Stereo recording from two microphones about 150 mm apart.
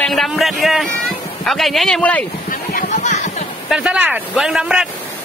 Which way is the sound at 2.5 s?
60° left (ahead or behind).